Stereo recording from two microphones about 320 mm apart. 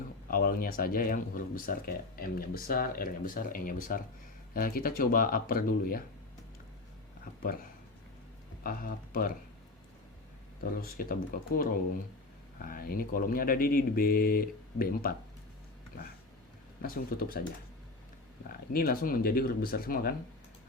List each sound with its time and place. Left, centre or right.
0.3 s speech: left
8.6 s speech: left
10.6 s speech: left
16.8 s speech: left
18.7 s speech: left